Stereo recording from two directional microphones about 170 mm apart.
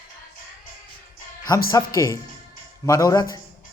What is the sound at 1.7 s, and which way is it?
Speech, 20° left (ahead or behind).